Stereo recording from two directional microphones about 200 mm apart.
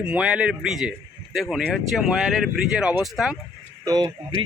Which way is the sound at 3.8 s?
20° right (ahead or behind).